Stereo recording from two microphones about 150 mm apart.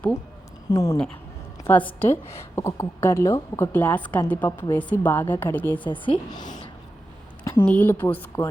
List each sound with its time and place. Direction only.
0.7 s speech: 20° left (ahead or behind)
1.6 s a woman's voice: 10° left (ahead or behind)
5.8 s a woman's voice: 35° left (ahead or behind)
7.6 s a woman's voice: 10° left (ahead or behind)